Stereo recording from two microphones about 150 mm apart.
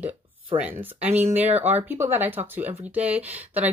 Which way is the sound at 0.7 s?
45° right (ahead or behind).